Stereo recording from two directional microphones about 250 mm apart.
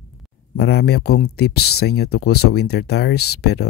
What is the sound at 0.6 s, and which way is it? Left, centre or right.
Speech, left.